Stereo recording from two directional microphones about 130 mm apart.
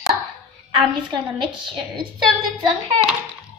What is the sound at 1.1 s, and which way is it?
Speech, 40° right (ahead or behind).